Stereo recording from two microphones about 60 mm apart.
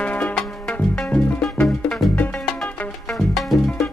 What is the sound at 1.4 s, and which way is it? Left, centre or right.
Music, centre.